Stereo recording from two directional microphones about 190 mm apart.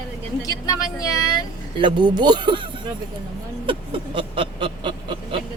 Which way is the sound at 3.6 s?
25° right (ahead or behind).